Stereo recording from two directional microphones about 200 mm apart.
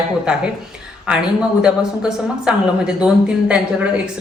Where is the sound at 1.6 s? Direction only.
5° right (ahead or behind).